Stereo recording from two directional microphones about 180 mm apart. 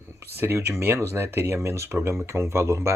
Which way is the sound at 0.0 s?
15° right (ahead or behind).